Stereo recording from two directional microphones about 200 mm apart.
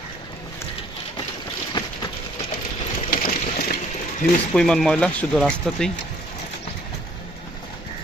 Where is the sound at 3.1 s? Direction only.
45° left (ahead or behind).